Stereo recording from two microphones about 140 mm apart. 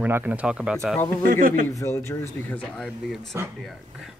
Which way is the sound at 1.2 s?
80° right.